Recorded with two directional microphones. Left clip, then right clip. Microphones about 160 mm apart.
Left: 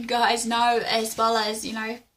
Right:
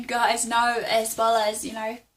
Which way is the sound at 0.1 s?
10° left (ahead or behind).